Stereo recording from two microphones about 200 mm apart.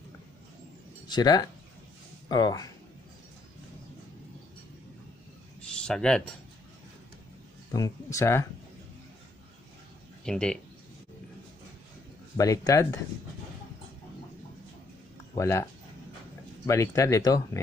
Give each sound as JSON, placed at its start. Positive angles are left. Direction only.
{"t": 1.0, "sound": "speech", "side_deg": 20}
{"t": 5.6, "sound": "a sound", "side_deg": 5}
{"t": 7.7, "sound": "speech", "side_deg": 15}
{"t": 10.2, "sound": "speech", "side_deg": 5}
{"t": 12.4, "sound": "speech", "side_deg": 15}
{"t": 15.3, "sound": "speech", "side_deg": 15}